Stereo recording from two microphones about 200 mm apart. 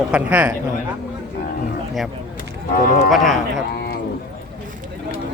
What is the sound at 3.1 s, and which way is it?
Speech, centre (ahead or behind).